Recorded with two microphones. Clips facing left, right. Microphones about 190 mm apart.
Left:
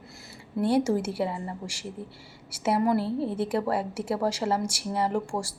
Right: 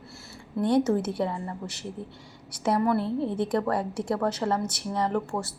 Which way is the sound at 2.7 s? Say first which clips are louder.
Left 1 dB; 30° left (ahead or behind).